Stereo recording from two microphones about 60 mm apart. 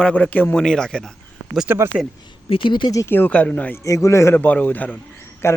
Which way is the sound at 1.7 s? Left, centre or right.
Right.